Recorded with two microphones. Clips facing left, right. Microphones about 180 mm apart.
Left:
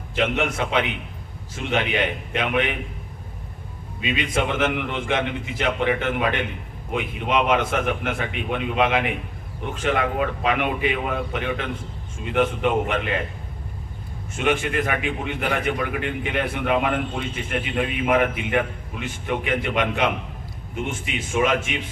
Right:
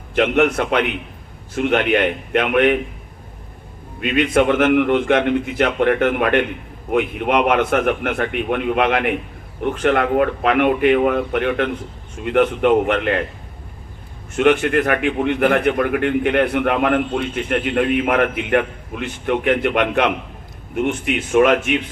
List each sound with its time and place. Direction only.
0.2 s a man's voice: 55° right (ahead or behind)
4.0 s a man's voice: 55° right (ahead or behind)
14.3 s a man's voice: 60° right (ahead or behind)